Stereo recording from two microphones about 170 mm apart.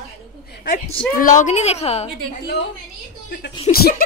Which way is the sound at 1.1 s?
50° left (ahead or behind).